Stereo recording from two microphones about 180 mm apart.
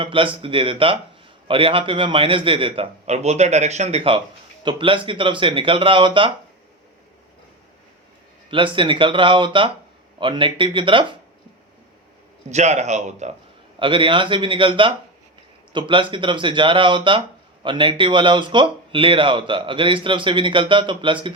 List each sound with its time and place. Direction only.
0.0 s a man's voice: 30° right (ahead or behind)
8.4 s speech: 30° right (ahead or behind)
12.5 s a man's voice: 40° right (ahead or behind)
13.7 s speech: 30° right (ahead or behind)